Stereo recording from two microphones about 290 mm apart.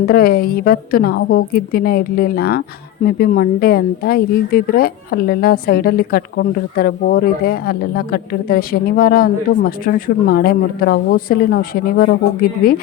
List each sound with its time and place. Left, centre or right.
0.1 s a woman's voice: left